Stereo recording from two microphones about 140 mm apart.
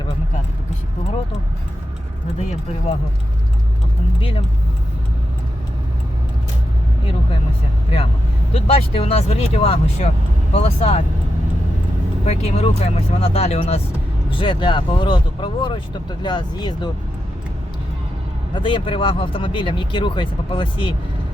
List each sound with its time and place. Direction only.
4.2 s speech: 45° left (ahead or behind)
8.5 s speech: 45° left (ahead or behind)
12.2 s speech: 50° left (ahead or behind)
14.3 s speech: 35° left (ahead or behind)
18.5 s speech: 35° left (ahead or behind)